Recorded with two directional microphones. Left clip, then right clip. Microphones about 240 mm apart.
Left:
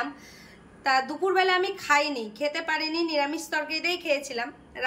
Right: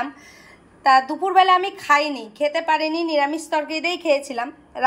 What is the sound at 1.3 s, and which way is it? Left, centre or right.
A woman's voice, centre.